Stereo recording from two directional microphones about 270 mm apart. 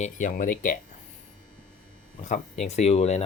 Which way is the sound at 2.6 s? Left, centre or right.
Left.